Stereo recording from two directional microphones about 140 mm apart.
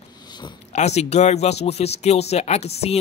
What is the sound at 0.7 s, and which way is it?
Speech, 50° left (ahead or behind).